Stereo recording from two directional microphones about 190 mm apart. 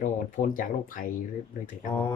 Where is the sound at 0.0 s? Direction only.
45° left (ahead or behind).